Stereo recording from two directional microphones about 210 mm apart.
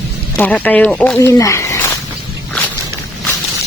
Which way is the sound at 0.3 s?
5° left (ahead or behind).